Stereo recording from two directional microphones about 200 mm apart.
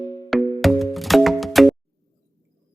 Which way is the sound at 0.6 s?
Centre (ahead or behind).